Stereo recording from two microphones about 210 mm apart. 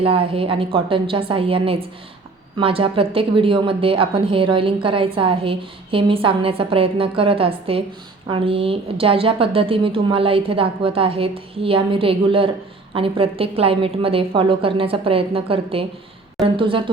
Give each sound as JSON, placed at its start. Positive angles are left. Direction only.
{"t": 0.0, "sound": "a woman's voice", "side_deg": -25}